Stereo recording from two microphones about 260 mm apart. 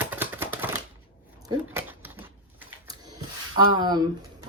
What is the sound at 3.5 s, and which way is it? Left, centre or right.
Speech, centre.